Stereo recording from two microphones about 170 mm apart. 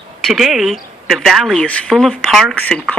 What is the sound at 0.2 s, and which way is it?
A woman's voice, centre (ahead or behind).